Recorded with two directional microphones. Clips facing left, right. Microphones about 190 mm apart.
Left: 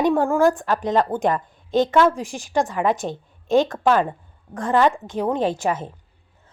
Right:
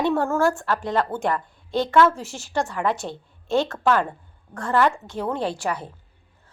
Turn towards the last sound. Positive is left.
turn(degrees=20)  # may be behind; listen again after turning